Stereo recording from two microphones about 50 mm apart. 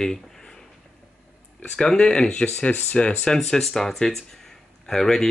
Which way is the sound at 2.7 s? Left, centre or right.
Left.